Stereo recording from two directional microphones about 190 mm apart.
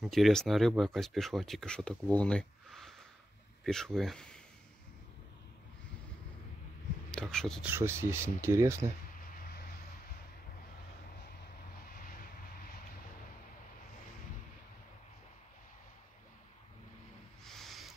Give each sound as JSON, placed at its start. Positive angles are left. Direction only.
{"t": 0.0, "sound": "speech", "side_deg": 0}
{"t": 7.1, "sound": "speech", "side_deg": 5}
{"t": 7.6, "sound": "speech", "side_deg": -10}
{"t": 9.4, "sound": "vehicle", "side_deg": 55}
{"t": 17.5, "sound": "owl", "side_deg": 0}